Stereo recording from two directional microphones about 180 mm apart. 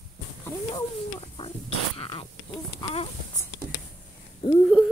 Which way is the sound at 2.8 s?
35° left (ahead or behind).